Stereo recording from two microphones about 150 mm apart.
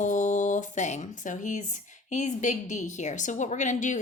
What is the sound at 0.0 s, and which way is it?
Speech, 55° left (ahead or behind).